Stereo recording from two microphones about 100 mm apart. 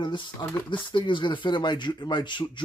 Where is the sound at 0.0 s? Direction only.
50° left (ahead or behind).